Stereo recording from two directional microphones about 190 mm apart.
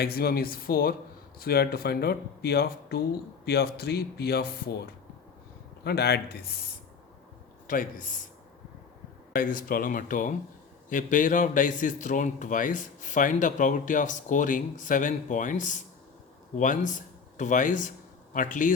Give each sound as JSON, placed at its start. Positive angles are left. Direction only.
{"t": 0.0, "sound": "a man's voice", "side_deg": 55}
{"t": 7.7, "sound": "a man's voice", "side_deg": 45}
{"t": 9.3, "sound": "a man's voice", "side_deg": 45}